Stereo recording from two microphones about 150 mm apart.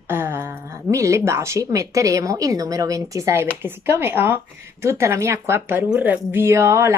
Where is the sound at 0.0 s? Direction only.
15° right (ahead or behind).